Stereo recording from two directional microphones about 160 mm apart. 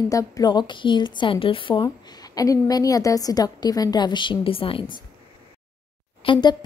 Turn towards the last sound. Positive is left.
turn(degrees=30)  # may be behind; listen again after turning